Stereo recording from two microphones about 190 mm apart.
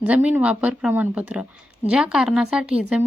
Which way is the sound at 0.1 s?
5° right (ahead or behind).